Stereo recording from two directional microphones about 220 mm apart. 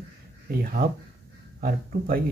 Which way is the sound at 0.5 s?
40° right (ahead or behind).